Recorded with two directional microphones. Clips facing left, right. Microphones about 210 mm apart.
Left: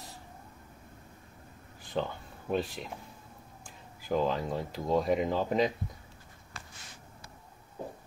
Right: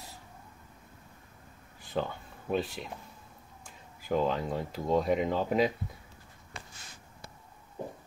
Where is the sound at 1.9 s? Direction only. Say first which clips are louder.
Even; centre (ahead or behind).